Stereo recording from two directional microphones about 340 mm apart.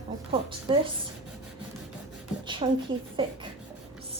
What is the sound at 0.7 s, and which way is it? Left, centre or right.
Speech, centre.